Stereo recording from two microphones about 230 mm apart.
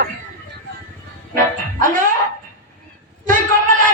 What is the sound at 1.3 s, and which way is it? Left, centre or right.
Music, right.